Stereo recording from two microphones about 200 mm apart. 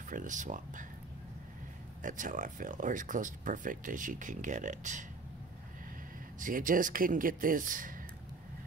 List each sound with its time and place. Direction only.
0.1 s speech: 40° right (ahead or behind)
2.0 s speech: 40° right (ahead or behind)
6.4 s speech: 45° right (ahead or behind)